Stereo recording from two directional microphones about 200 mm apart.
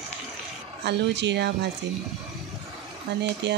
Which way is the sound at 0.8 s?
60° right (ahead or behind).